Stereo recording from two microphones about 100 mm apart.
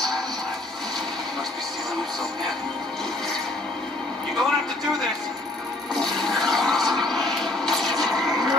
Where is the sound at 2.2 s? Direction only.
5° left (ahead or behind).